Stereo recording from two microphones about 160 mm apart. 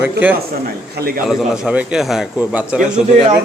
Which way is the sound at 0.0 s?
10° right (ahead or behind).